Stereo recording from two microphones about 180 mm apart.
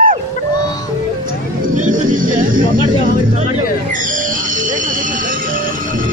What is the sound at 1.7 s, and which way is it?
Music, 45° right (ahead or behind).